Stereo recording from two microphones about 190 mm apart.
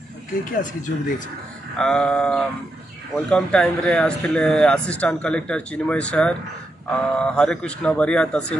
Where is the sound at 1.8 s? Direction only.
5° left (ahead or behind).